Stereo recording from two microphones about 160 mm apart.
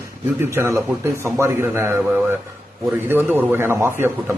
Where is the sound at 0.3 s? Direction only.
15° right (ahead or behind).